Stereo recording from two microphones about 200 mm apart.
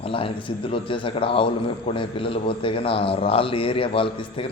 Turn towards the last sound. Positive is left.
turn(degrees=25)  # may be behind; listen again after turning